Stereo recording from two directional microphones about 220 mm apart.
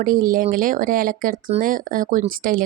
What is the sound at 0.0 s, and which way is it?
Speech, 40° right (ahead or behind).